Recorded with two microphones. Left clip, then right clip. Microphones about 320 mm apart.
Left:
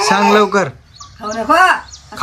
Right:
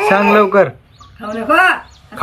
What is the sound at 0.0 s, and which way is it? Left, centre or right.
Speech, centre.